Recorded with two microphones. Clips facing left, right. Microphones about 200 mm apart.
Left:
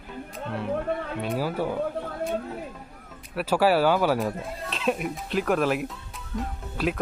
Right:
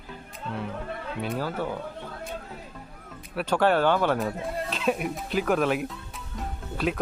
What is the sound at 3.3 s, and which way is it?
Speech, 5° left (ahead or behind).